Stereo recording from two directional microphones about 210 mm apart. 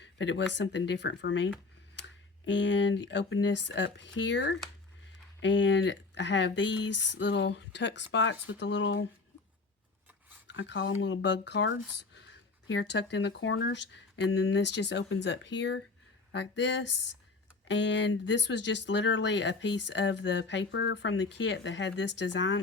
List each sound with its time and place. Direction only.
0.0 s speech: 60° left (ahead or behind)
10.4 s speech: 60° left (ahead or behind)